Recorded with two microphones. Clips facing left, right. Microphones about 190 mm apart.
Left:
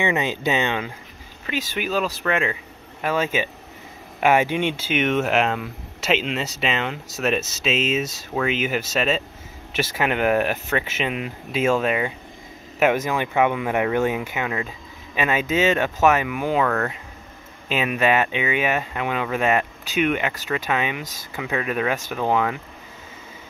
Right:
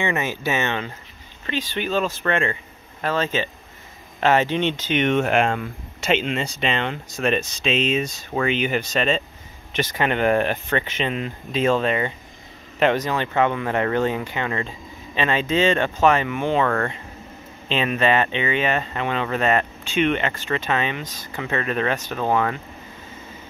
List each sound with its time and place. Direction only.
0.0 s speech: 15° left (ahead or behind)